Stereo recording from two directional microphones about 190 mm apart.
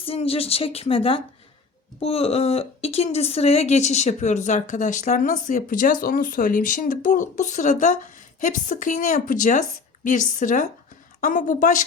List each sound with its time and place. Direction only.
0.0 s a woman's voice: 30° left (ahead or behind)